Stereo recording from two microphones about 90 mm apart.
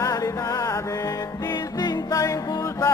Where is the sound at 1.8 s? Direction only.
40° left (ahead or behind).